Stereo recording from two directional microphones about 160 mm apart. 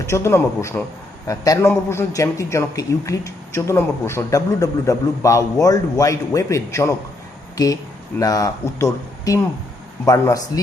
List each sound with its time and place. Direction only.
0.0 s a man's voice: 20° left (ahead or behind)